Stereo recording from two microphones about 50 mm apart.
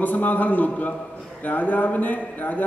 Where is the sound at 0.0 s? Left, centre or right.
Left.